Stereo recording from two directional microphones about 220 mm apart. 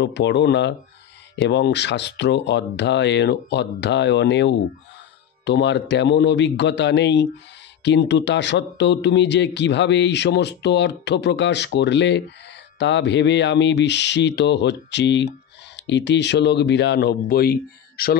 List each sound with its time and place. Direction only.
0.0 s speech: 50° left (ahead or behind)